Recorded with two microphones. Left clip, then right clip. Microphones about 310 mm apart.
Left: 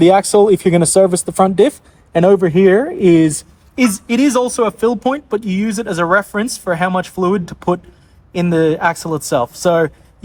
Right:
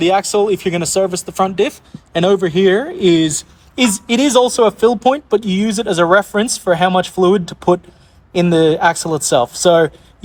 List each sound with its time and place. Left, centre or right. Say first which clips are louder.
0.0 s speech: left 4 dB; centre